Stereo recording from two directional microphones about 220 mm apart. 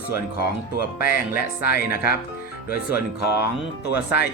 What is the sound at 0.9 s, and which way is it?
Speech, 40° left (ahead or behind).